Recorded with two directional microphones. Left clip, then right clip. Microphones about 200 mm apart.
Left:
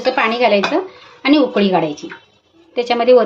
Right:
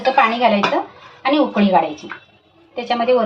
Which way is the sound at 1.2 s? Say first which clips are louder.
Left 3 dB; 60° left (ahead or behind).